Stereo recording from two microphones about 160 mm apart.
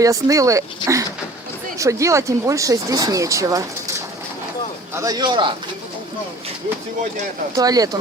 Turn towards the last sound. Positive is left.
turn(degrees=-25)  # may be behind; listen again after turning